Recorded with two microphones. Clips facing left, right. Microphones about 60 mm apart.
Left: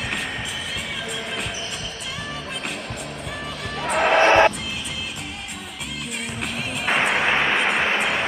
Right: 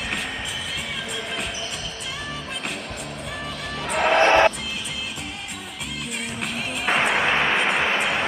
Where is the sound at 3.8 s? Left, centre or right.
Centre.